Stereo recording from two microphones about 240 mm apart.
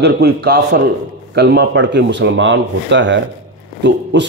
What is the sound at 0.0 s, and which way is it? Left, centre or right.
Speech, right.